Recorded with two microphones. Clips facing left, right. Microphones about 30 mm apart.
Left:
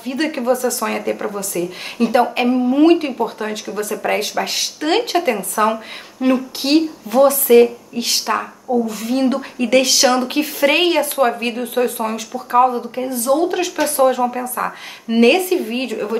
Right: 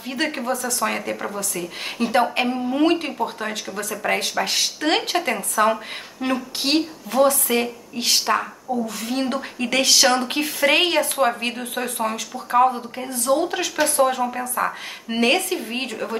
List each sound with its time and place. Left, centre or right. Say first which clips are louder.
0.0 s speech: left 4 dB; centre
0.4 s speech: left 6 dB; centre